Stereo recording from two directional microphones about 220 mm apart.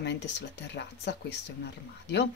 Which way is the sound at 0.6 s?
50° left (ahead or behind).